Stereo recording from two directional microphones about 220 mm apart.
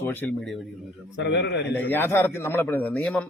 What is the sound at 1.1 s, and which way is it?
Speech, 55° left (ahead or behind).